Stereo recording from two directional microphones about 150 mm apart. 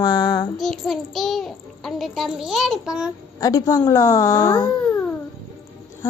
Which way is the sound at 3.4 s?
25° left (ahead or behind).